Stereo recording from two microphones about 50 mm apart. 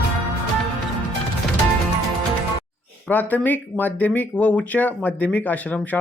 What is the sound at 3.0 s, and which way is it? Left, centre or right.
Speech, left.